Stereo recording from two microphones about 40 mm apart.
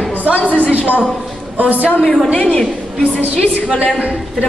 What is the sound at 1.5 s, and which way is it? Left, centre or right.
Speech, right.